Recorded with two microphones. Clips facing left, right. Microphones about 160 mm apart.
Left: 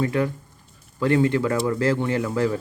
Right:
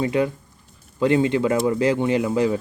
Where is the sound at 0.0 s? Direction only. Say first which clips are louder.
Right 2 dB; 20° right (ahead or behind).